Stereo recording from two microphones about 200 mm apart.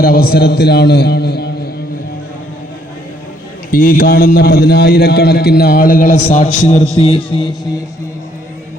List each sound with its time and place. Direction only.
0.0 s a man's voice: 50° left (ahead or behind)
3.7 s a man's voice: 45° left (ahead or behind); by 7.5 s 25° left (ahead or behind)